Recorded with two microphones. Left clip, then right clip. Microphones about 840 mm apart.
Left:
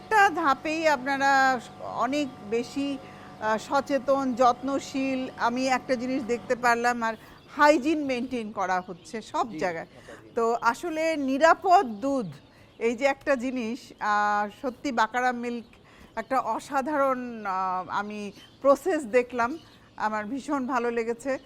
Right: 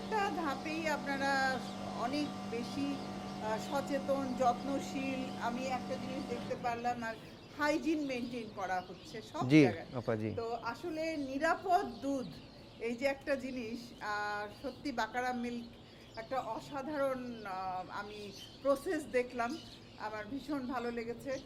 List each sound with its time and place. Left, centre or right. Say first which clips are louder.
0.1 s a woman's voice: left 15 dB; left